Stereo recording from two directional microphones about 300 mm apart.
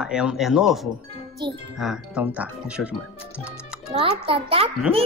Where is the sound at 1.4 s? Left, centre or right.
Centre.